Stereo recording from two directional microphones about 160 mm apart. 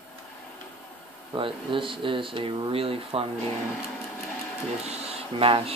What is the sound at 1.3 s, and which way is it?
Speech, 30° right (ahead or behind).